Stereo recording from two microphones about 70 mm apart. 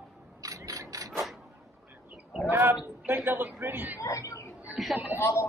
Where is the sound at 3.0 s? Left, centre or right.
Right.